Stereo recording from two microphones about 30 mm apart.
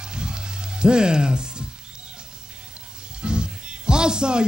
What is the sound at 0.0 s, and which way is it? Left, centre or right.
Music, right.